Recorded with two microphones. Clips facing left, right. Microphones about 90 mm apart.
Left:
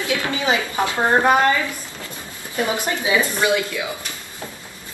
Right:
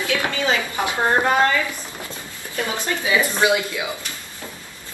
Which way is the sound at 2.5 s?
20° left (ahead or behind).